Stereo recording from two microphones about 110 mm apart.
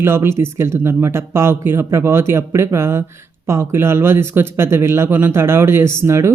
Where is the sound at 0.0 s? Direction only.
20° right (ahead or behind).